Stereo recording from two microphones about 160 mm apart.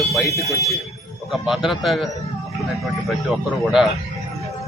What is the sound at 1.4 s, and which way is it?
Speech, centre (ahead or behind).